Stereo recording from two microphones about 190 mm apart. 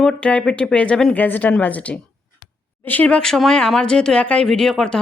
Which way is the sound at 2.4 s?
25° left (ahead or behind).